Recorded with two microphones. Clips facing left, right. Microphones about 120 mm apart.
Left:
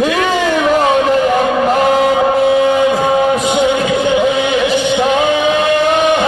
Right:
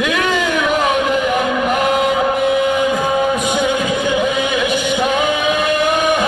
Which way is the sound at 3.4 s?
25° left (ahead or behind).